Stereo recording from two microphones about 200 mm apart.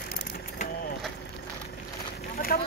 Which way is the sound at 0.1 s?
50° left (ahead or behind).